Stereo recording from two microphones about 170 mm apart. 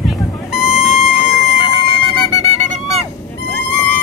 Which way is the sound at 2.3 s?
40° right (ahead or behind).